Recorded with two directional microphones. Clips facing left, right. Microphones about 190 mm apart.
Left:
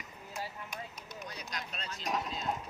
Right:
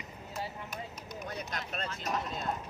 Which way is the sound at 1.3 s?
55° right (ahead or behind).